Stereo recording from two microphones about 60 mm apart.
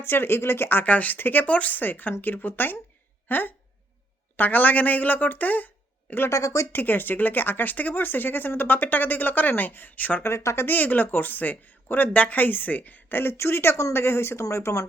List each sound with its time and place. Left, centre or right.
0.0 s speech: left
6.3 s speech: left
6.7 s speech: left
10.2 s a woman's voice: left
10.7 s a woman's voice: left
14.5 s speech: left